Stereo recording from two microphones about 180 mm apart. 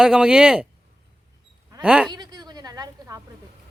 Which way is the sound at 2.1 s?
25° right (ahead or behind).